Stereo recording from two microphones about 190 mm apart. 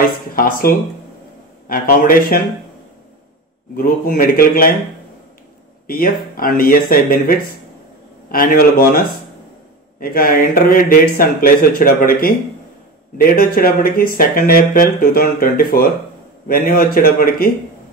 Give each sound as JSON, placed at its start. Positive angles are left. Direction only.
{"t": 0.4, "sound": "speech", "side_deg": 50}
{"t": 3.7, "sound": "speech", "side_deg": 50}
{"t": 5.9, "sound": "speech", "side_deg": 50}
{"t": 9.9, "sound": "speech", "side_deg": 50}